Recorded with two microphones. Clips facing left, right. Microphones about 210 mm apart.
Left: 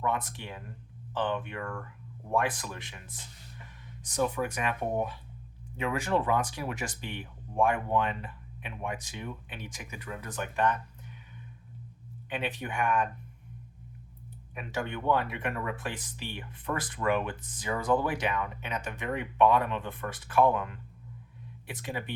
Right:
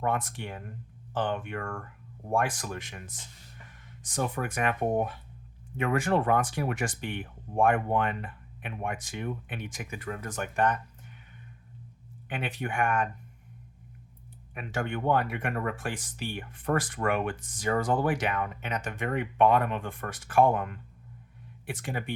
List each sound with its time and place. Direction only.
0.0 s speech: 50° right (ahead or behind)
12.3 s speech: 50° right (ahead or behind)
14.5 s speech: 55° right (ahead or behind)